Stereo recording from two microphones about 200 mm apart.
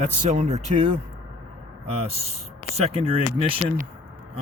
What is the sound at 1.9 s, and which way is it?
Speech, 30° right (ahead or behind).